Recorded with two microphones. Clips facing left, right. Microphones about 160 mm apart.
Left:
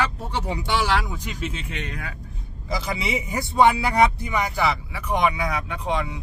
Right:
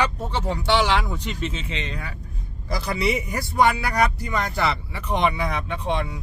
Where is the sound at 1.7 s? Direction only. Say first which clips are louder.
Right 1 dB; 90° right.